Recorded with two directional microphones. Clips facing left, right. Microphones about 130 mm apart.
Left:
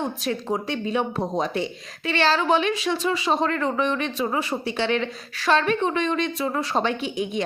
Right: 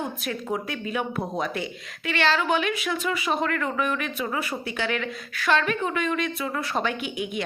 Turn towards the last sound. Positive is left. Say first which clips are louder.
# left 4 dB
turn(degrees=30)  # may be behind; listen again after turning